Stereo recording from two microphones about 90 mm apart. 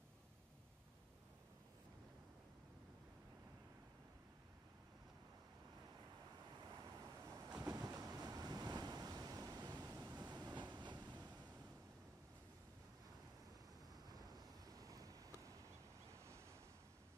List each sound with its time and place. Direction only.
6.6 s vehicle: 40° right (ahead or behind)
7.6 s waves: 45° right (ahead or behind)
14.0 s a sound: 45° right (ahead or behind)